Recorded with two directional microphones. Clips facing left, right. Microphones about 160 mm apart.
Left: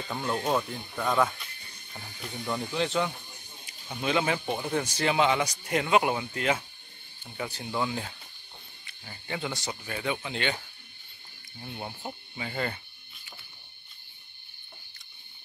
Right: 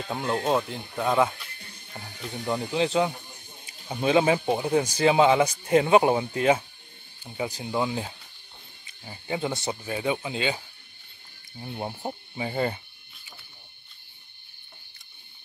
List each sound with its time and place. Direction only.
0.1 s speech: 20° right (ahead or behind)
0.9 s speech: 10° right (ahead or behind)
2.7 s speech: 35° right (ahead or behind); by 10.6 s 10° right (ahead or behind)
11.6 s speech: 30° right (ahead or behind)